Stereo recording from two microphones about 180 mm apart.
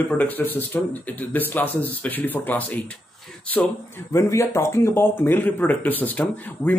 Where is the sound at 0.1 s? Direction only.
10° left (ahead or behind).